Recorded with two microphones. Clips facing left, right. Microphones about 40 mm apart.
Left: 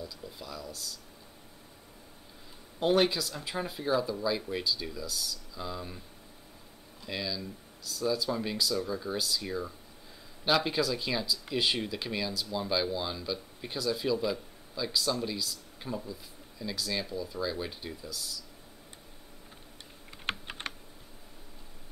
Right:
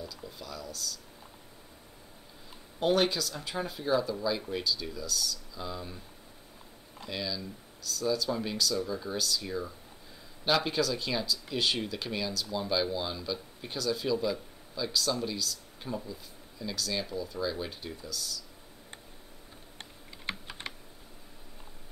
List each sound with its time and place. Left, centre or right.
0.0 s speech: centre
2.8 s speech: centre
7.1 s speech: centre
20.2 s computer keyboard: left